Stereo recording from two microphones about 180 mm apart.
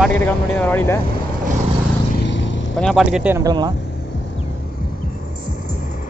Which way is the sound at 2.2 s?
90° left.